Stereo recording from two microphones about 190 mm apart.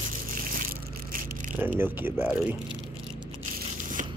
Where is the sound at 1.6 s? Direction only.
10° right (ahead or behind).